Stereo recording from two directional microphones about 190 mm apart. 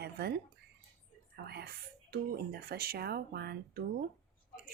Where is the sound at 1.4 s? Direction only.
55° right (ahead or behind).